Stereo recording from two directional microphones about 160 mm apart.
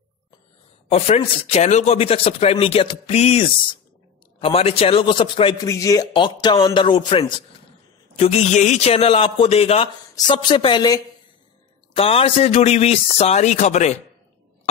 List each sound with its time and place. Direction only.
0.8 s a man's voice: 40° left (ahead or behind)
6.4 s music: 30° left (ahead or behind)
8.2 s a man's voice: 40° left (ahead or behind)
10.3 s music: 30° left (ahead or behind)
11.9 s a man's voice: 35° left (ahead or behind)